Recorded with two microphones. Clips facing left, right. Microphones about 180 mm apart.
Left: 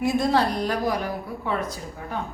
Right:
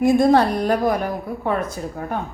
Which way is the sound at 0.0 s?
50° right (ahead or behind).